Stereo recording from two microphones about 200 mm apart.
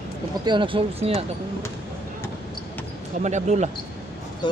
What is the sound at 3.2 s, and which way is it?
Speech, 35° right (ahead or behind).